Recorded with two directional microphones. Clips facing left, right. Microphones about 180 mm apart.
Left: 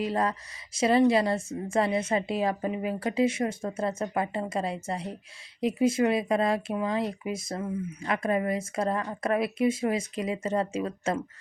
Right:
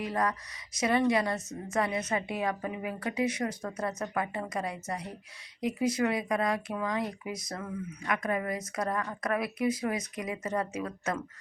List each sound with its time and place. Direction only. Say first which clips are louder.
0.0 s speech: left 3 dB; 25° left (ahead or behind)